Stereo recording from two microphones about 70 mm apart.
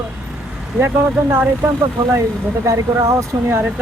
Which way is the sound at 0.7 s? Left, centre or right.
Right.